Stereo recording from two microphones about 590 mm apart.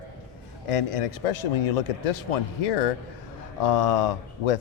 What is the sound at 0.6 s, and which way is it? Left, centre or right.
Speech, left.